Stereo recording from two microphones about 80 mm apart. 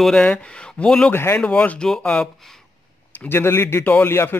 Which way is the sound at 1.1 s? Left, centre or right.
Left.